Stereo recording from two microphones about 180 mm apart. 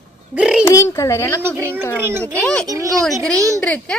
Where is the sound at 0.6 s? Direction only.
15° left (ahead or behind).